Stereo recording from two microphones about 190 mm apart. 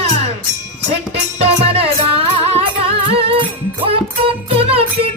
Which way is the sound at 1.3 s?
30° right (ahead or behind).